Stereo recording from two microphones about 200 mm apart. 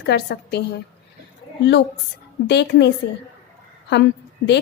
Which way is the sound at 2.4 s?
60° left (ahead or behind).